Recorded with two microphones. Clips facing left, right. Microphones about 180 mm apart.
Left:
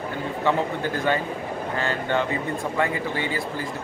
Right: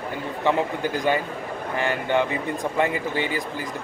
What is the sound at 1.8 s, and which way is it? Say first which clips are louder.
A man's voice: right 3 dB; 15° right (ahead or behind).